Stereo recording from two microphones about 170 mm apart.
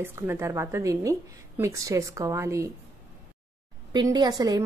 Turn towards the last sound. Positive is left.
turn(degrees=-20)  # may be behind; listen again after turning